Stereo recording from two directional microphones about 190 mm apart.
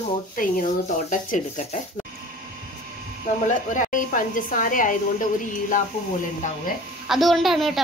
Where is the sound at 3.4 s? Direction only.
40° left (ahead or behind).